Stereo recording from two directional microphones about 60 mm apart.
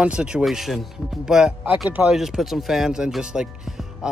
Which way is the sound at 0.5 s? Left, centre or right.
Centre.